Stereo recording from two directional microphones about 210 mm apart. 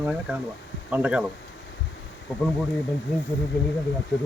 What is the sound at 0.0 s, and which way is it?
Speech, 5° right (ahead or behind).